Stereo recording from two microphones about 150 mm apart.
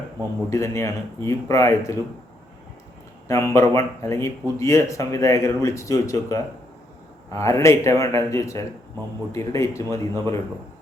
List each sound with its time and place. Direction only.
0.5 s speech: 20° left (ahead or behind)
3.2 s speech: 20° left (ahead or behind)